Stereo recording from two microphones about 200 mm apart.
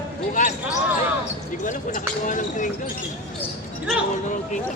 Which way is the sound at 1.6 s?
40° left (ahead or behind).